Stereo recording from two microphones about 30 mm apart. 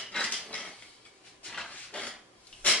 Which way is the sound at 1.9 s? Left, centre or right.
Left.